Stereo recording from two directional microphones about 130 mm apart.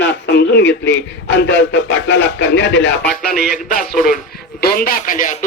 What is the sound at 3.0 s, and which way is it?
Music, centre (ahead or behind).